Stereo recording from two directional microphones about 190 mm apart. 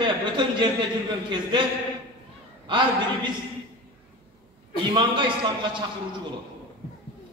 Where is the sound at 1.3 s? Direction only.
25° right (ahead or behind).